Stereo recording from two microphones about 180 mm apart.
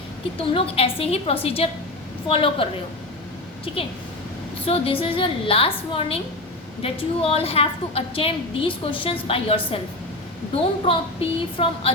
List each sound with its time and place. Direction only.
0.3 s a woman's voice: 30° left (ahead or behind)
3.7 s a woman's voice: 30° left (ahead or behind)